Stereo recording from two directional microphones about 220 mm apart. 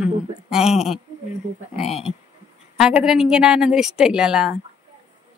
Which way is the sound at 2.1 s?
20° right (ahead or behind).